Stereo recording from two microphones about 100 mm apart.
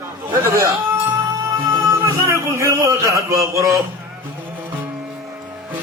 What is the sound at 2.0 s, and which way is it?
Speech, 30° right (ahead or behind).